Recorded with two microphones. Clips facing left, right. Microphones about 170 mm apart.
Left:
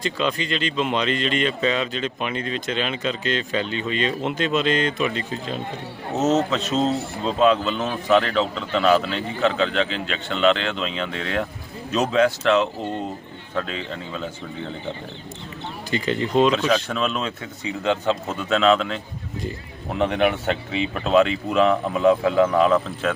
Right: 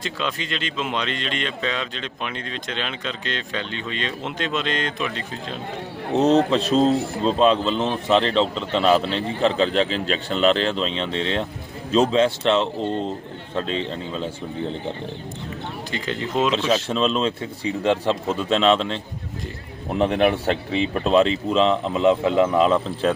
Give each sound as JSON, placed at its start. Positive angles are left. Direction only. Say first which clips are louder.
{"t": 0.0, "sound": "speech", "louder": "left 4 dB", "side_deg": 0}
{"t": 6.2, "sound": "speech", "louder": "right 2 dB", "side_deg": -30}
{"t": 15.9, "sound": "speech", "louder": "left 5 dB", "side_deg": 0}
{"t": 16.6, "sound": "speech", "louder": "right 1 dB", "side_deg": -30}
{"t": 20.0, "sound": "speech", "louder": "right 2 dB", "side_deg": -35}